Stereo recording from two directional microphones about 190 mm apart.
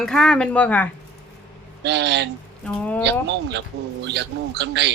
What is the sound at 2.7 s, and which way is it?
Speech, 5° left (ahead or behind).